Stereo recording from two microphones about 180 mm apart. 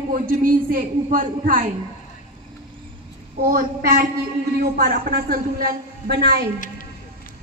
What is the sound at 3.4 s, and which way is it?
A man's voice, 45° right (ahead or behind).